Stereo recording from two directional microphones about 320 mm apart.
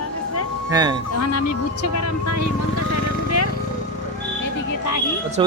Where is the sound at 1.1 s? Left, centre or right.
Left.